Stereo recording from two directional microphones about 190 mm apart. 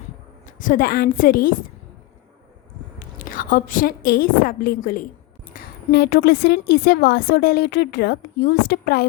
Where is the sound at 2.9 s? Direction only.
45° left (ahead or behind).